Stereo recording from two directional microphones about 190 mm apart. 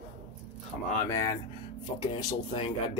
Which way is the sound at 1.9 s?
25° left (ahead or behind).